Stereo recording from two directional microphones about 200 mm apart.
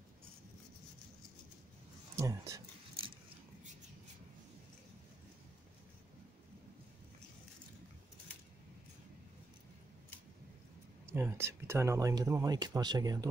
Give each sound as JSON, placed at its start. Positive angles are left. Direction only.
{"t": 2.1, "sound": "speech", "side_deg": -15}
{"t": 11.1, "sound": "speech", "side_deg": -10}